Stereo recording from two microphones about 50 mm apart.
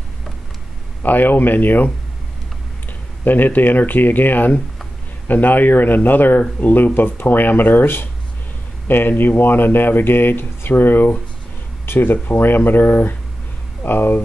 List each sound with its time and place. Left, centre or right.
1.0 s speech: left
3.3 s speech: left